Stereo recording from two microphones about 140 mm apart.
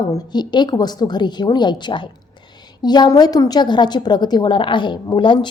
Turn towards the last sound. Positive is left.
turn(degrees=35)  # may be behind; listen again after turning